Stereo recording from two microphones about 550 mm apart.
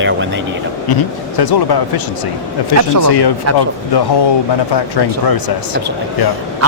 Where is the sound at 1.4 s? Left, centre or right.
Left.